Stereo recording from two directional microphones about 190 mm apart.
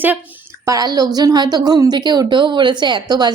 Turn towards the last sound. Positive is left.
turn(degrees=-20)  # may be behind; listen again after turning